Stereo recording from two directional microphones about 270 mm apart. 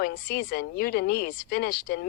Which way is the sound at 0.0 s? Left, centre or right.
Left.